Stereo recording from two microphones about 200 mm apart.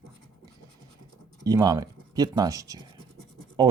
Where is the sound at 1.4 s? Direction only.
15° right (ahead or behind).